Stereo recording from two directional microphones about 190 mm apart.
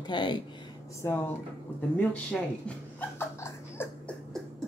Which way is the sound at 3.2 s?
10° left (ahead or behind).